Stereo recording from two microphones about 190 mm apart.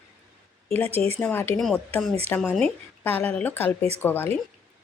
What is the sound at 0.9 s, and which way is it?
Speech, 30° right (ahead or behind).